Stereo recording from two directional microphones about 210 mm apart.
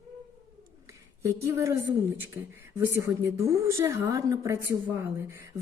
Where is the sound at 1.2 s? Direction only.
15° right (ahead or behind).